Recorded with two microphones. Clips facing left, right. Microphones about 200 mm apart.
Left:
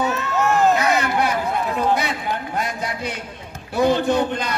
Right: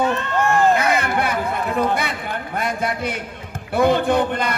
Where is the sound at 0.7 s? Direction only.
55° right (ahead or behind).